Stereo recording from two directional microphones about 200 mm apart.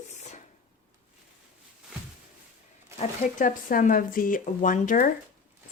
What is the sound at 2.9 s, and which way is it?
Speech, 40° left (ahead or behind).